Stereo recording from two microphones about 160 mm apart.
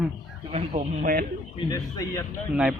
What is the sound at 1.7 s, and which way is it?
Speech, 20° left (ahead or behind).